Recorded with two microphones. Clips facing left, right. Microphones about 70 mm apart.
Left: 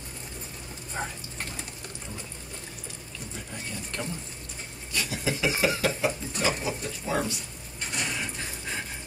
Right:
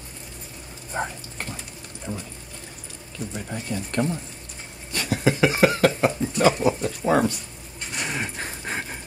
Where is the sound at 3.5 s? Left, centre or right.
Right.